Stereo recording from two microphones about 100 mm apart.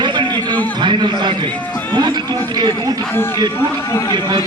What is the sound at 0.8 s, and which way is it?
A man's voice, 50° right (ahead or behind).